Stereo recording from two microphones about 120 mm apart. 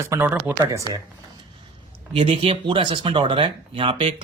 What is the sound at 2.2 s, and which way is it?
Speech, 50° right (ahead or behind).